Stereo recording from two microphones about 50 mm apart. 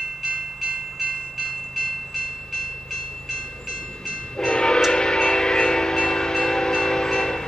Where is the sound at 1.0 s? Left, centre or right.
Centre.